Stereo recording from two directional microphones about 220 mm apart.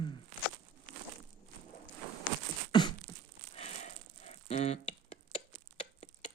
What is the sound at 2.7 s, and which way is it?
Beatboxing, 20° left (ahead or behind).